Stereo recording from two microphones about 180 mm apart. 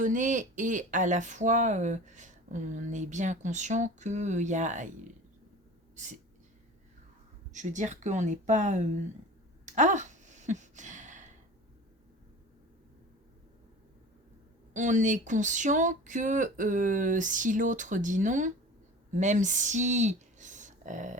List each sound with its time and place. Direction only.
0.0 s speech: 45° right (ahead or behind)
7.5 s speech: 40° right (ahead or behind)
9.6 s a sound: 40° right (ahead or behind)
14.7 s speech: 45° right (ahead or behind)